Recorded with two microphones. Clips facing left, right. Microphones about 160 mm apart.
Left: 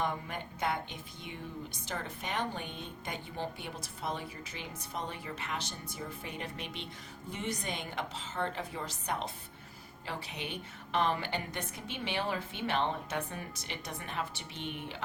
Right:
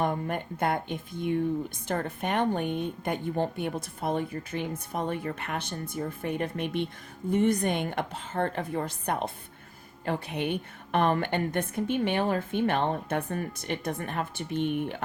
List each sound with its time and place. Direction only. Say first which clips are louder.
0.0 s a woman's voice: right 7 dB; 55° right (ahead or behind)